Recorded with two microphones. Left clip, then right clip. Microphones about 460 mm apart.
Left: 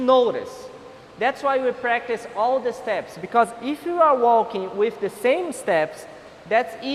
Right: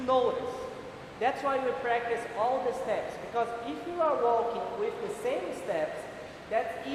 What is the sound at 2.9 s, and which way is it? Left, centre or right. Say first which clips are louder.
Speech: left 7 dB; left.